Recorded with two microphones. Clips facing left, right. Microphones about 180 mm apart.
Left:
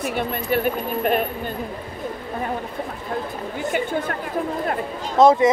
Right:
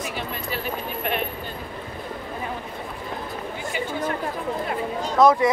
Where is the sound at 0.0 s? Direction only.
55° left (ahead or behind).